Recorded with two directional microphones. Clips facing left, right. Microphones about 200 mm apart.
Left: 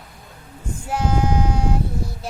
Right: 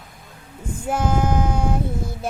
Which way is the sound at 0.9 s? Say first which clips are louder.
Right 1 dB; 50° right (ahead or behind).